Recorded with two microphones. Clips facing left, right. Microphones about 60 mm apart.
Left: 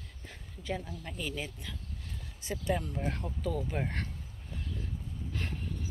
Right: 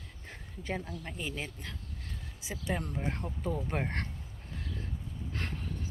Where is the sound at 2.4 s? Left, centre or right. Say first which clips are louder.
Left 4 dB; centre.